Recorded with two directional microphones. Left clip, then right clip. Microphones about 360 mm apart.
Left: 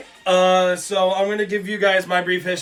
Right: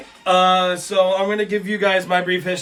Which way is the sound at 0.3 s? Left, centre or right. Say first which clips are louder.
Even; centre.